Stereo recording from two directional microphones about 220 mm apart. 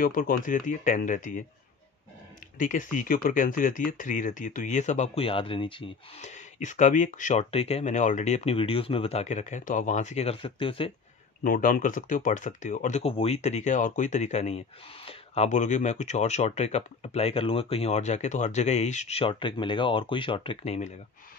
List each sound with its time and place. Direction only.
0.0 s speech: 40° left (ahead or behind)
2.6 s speech: 35° left (ahead or behind)
11.4 s speech: 40° left (ahead or behind)